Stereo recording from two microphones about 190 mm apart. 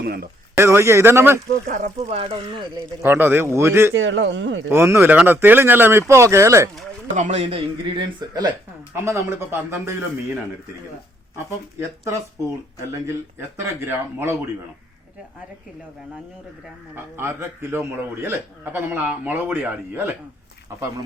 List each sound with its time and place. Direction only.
0.0 s a man's voice: 55° right (ahead or behind)
0.5 s a man's voice: 15° right (ahead or behind)
1.6 s speech: 40° right (ahead or behind)
3.0 s a man's voice: 10° right (ahead or behind)
3.9 s speech: 80° right
4.7 s a man's voice: 15° right (ahead or behind)
7.2 s a man's voice: 35° right (ahead or behind); by 9.9 s 15° right (ahead or behind)
13.7 s a man's voice: 15° right (ahead or behind)
16.9 s a man's voice: 15° right (ahead or behind)